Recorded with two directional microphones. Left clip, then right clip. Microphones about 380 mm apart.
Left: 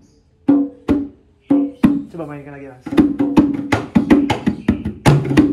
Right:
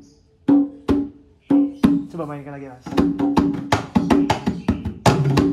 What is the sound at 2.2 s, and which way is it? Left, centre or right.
Speech, right.